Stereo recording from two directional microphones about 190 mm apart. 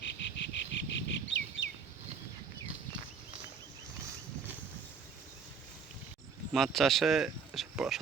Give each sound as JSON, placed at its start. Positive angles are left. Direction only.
{"t": 0.0, "sound": "bird", "side_deg": 65}
{"t": 6.5, "sound": "speech", "side_deg": 0}